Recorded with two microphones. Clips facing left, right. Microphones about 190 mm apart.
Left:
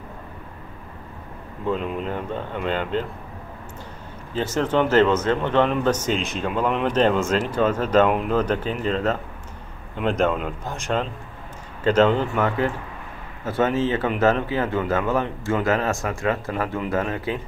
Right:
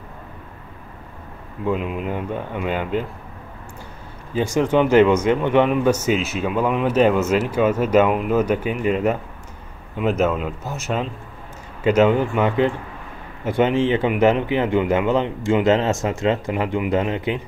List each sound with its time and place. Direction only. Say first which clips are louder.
1.7 s a man's voice: right 2 dB; 5° right (ahead or behind)
4.3 s a man's voice: right 4 dB; 15° right (ahead or behind)